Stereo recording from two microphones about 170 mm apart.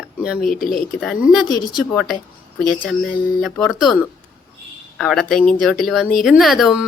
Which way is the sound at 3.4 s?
Centre (ahead or behind).